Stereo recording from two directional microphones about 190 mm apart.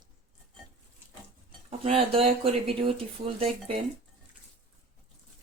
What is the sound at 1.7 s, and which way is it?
Speech, 30° right (ahead or behind).